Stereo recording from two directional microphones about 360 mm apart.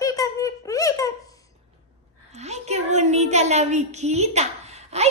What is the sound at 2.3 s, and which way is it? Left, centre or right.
A woman's voice, centre.